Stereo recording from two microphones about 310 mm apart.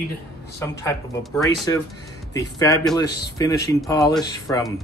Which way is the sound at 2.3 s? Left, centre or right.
Centre.